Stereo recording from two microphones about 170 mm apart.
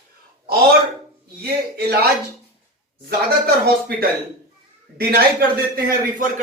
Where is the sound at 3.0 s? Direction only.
65° right (ahead or behind).